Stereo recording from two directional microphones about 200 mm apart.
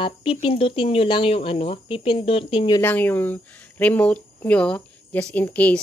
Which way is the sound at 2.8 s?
10° left (ahead or behind).